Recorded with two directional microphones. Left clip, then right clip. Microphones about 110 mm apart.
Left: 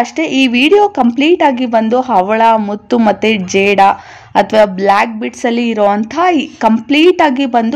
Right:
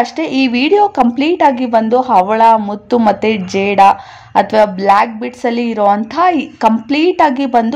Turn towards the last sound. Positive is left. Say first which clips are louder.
# even
turn(degrees=10)  # may be behind; listen again after turning